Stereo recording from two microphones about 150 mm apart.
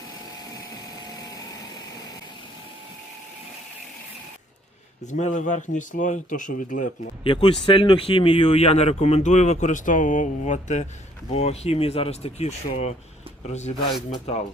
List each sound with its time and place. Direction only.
5.0 s speech: 55° left (ahead or behind)
7.3 s speech: 35° left (ahead or behind)